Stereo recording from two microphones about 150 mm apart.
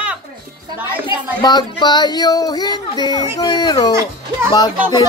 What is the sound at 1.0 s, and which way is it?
Speech, 30° left (ahead or behind).